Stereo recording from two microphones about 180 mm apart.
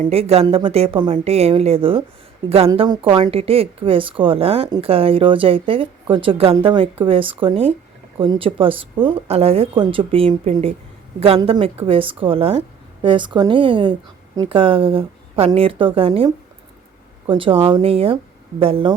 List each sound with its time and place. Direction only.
0.0 s a woman's voice: 35° right (ahead or behind)